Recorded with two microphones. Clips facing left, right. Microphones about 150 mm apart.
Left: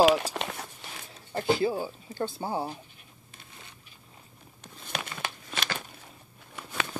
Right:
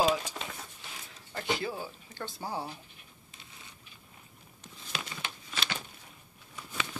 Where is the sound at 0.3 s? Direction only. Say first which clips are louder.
Left 7 dB; 70° left (ahead or behind).